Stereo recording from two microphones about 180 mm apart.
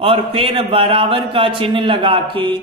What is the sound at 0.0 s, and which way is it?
Speech, 30° right (ahead or behind).